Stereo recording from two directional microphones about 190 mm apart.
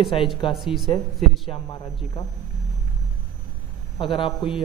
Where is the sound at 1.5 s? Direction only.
20° left (ahead or behind).